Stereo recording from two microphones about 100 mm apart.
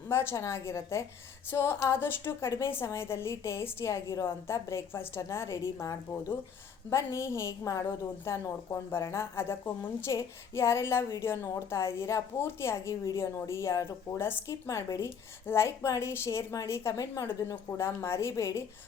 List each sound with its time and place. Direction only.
0.1 s a woman's voice: 25° left (ahead or behind)